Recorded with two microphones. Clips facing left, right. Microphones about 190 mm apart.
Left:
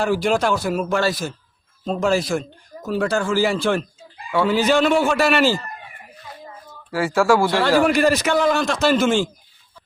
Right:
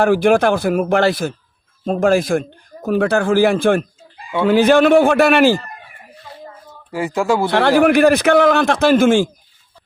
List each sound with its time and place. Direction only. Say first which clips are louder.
0.0 s a man's voice: right 6 dB; 55° right (ahead or behind)
6.9 s speech: left 1 dB; 20° right (ahead or behind)
7.8 s a man's voice: right 7 dB; 55° right (ahead or behind)